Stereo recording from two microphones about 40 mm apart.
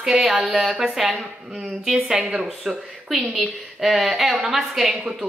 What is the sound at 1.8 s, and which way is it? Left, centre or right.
A woman's voice, centre.